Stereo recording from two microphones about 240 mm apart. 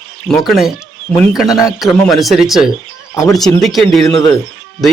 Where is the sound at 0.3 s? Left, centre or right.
Centre.